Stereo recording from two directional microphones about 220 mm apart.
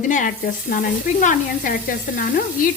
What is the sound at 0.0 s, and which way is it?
Frying, 35° left (ahead or behind).